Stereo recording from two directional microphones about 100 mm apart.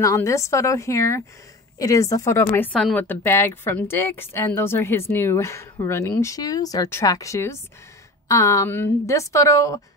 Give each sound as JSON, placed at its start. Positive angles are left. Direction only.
{"t": 0.0, "sound": "a woman's voice", "side_deg": 30}
{"t": 2.7, "sound": "speech", "side_deg": 5}
{"t": 3.0, "sound": "speech", "side_deg": 25}
{"t": 6.1, "sound": "a woman's voice", "side_deg": 40}
{"t": 8.6, "sound": "a woman's voice", "side_deg": 20}